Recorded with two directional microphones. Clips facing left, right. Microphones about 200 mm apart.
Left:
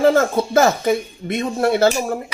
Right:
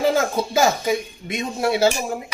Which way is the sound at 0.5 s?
55° left (ahead or behind).